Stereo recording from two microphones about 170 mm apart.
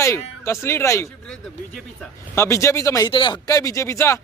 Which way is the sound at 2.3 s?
15° left (ahead or behind).